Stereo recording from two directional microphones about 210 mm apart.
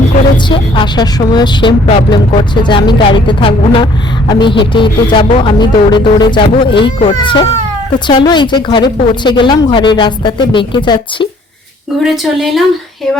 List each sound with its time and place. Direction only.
0.4 s speech: 20° left (ahead or behind)
12.0 s a woman's voice: centre (ahead or behind)